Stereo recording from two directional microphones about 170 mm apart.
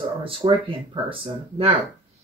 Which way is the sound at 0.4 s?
30° right (ahead or behind).